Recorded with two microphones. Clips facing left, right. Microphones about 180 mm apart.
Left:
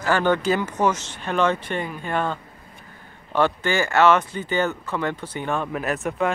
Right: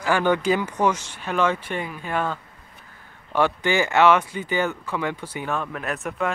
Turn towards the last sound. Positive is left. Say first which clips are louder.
# left 3 dB
turn(degrees=0)  # may be behind; listen again after turning